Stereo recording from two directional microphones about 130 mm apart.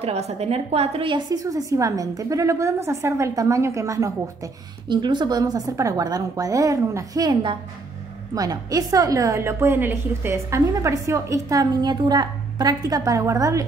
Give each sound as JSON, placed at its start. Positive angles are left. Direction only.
{"t": 0.0, "sound": "a woman's voice", "side_deg": -55}
{"t": 4.8, "sound": "a woman's voice", "side_deg": -35}